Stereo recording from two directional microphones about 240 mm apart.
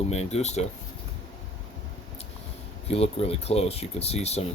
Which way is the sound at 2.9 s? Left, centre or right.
Left.